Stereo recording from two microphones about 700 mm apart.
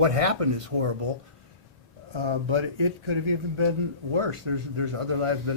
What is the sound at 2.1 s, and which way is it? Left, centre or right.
Speech, right.